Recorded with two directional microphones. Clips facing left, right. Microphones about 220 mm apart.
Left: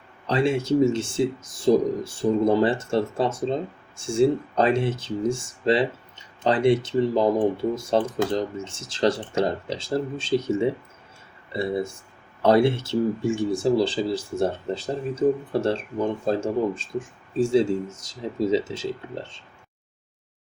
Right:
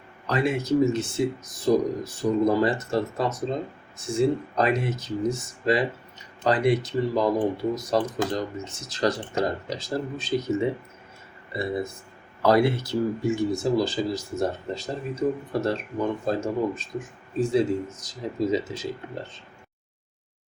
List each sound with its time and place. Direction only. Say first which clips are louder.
0.3 s speech: left 2 dB; 30° left (ahead or behind)